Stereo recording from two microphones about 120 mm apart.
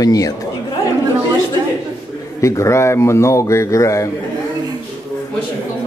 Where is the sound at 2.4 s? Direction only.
25° left (ahead or behind).